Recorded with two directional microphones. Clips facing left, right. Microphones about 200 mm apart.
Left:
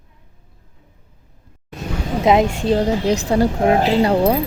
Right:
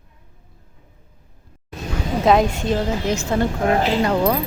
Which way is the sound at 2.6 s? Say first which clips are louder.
Left 4 dB; 35° left (ahead or behind).